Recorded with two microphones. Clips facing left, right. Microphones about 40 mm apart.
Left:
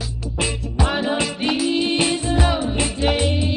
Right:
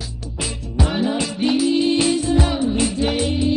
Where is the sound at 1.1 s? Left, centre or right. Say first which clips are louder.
Right 1 dB; left.